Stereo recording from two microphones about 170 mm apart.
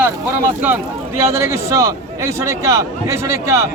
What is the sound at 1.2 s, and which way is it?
A man's voice, 15° right (ahead or behind).